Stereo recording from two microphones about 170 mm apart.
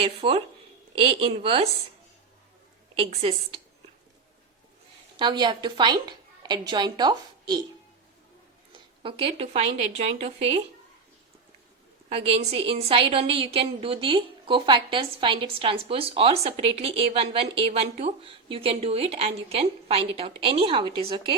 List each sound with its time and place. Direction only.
0.0 s a woman's voice: 35° right (ahead or behind)
2.9 s a woman's voice: 35° right (ahead or behind)
5.1 s a woman's voice: 25° right (ahead or behind)
9.0 s a woman's voice: 35° right (ahead or behind)
12.0 s a woman's voice: 35° right (ahead or behind)